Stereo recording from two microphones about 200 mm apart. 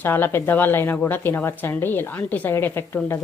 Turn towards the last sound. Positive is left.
turn(degrees=10)  # may be behind; listen again after turning